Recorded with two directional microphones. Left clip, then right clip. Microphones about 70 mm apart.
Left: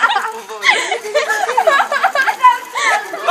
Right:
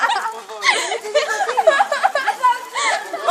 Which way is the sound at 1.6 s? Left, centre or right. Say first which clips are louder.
Even; right.